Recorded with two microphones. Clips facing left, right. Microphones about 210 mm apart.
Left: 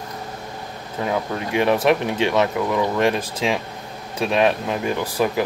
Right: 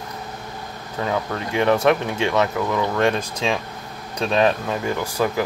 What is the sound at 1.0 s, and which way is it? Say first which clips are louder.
Speech: left 1 dB; 15° left (ahead or behind).